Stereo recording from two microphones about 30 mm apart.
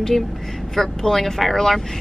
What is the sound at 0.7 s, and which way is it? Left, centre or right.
Speech, centre.